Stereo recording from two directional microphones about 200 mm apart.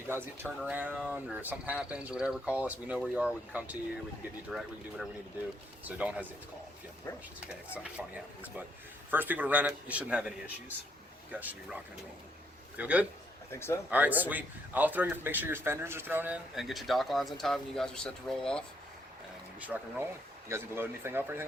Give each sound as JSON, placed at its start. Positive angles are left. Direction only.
{"t": 0.1, "sound": "speech", "side_deg": -10}
{"t": 7.4, "sound": "speech", "side_deg": -5}
{"t": 13.5, "sound": "speech", "side_deg": 10}
{"t": 13.9, "sound": "speech", "side_deg": -10}
{"t": 19.5, "sound": "speech", "side_deg": -10}